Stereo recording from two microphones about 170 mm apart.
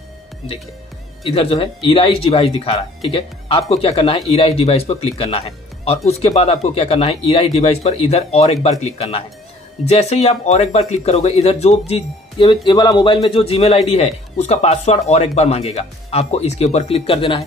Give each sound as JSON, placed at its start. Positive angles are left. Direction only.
{"t": 1.3, "sound": "a man's voice", "side_deg": 35}
{"t": 12.4, "sound": "a man's voice", "side_deg": 25}